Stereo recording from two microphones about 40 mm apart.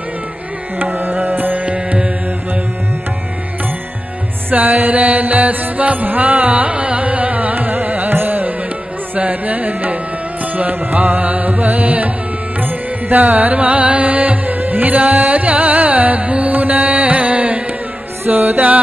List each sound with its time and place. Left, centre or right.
0.7 s music: right
4.5 s music: right
8.1 s carnatic music: right
9.1 s music: right
18.3 s music: right